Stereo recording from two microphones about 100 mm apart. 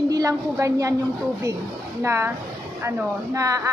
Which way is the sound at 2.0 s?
25° right (ahead or behind).